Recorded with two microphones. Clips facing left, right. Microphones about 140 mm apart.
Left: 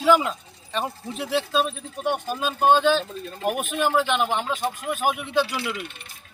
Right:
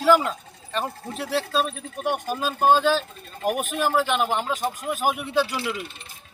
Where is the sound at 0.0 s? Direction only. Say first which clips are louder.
Even; centre (ahead or behind).